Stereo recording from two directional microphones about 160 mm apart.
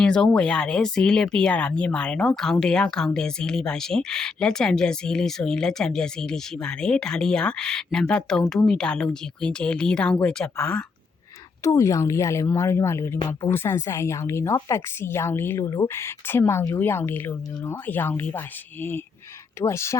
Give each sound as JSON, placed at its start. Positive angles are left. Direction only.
{"t": 0.0, "sound": "speech", "side_deg": 5}
{"t": 11.6, "sound": "a woman's voice", "side_deg": 20}